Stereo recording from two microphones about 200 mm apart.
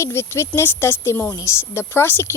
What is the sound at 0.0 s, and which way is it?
Speech, 15° left (ahead or behind).